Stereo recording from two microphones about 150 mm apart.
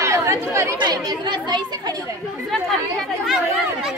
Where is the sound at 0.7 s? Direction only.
25° right (ahead or behind).